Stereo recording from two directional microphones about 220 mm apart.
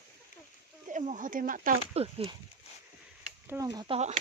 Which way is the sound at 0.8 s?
35° right (ahead or behind).